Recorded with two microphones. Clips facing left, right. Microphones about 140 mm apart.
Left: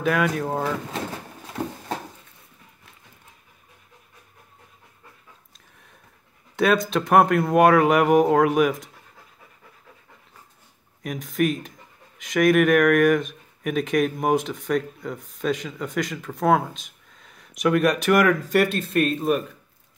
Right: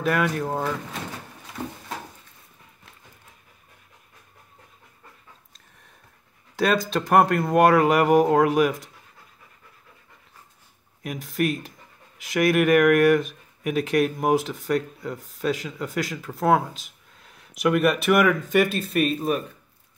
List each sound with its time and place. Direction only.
0.0 s speech: centre (ahead or behind)
6.5 s speech: centre (ahead or behind)
11.0 s speech: centre (ahead or behind)